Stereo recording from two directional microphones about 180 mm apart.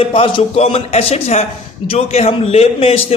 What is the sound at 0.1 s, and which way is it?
A man's voice, 30° left (ahead or behind).